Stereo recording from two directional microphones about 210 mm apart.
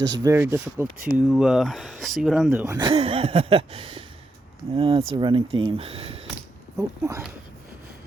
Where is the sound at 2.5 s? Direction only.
15° right (ahead or behind).